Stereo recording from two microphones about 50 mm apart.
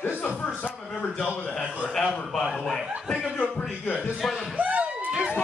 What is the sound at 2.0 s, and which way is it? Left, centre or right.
Speech, centre.